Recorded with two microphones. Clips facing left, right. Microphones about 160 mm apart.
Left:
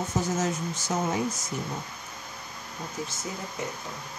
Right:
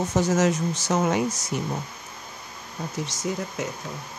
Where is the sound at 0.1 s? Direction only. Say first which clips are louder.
Right 7 dB; 85° right.